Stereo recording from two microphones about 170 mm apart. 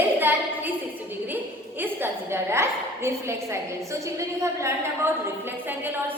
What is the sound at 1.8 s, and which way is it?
A woman's voice, 10° right (ahead or behind).